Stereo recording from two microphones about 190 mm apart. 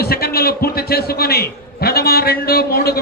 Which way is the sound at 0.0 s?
55° left (ahead or behind).